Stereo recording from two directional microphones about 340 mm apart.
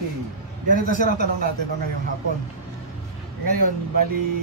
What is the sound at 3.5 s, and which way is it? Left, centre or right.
Speech, right.